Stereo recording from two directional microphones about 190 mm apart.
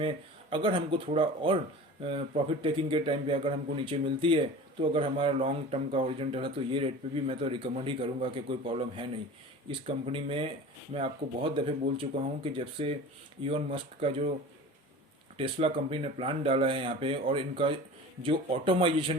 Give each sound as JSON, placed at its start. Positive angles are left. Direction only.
{"t": 0.5, "sound": "speech", "side_deg": -25}
{"t": 15.4, "sound": "speech", "side_deg": -30}